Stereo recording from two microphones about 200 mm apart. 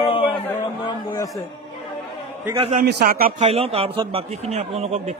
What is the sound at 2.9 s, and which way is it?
A man's voice, 50° right (ahead or behind).